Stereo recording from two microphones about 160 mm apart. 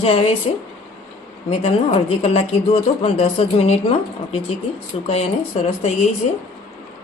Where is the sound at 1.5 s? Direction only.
45° left (ahead or behind).